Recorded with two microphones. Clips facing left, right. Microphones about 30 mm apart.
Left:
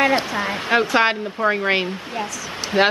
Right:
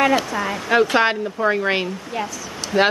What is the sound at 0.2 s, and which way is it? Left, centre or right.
Speech, left.